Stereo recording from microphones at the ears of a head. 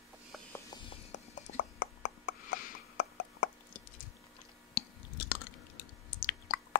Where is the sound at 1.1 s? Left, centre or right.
Left.